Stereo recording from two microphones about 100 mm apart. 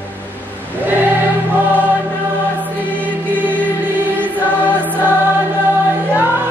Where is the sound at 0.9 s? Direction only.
20° right (ahead or behind).